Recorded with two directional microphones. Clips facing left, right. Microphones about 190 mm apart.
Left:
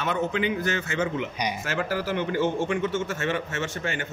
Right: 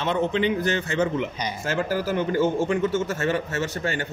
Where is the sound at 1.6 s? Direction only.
30° right (ahead or behind).